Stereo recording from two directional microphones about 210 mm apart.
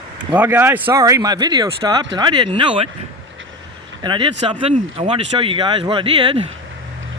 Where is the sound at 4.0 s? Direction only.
20° right (ahead or behind).